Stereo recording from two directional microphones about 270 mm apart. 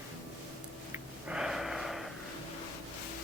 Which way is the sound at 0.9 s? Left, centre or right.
Centre.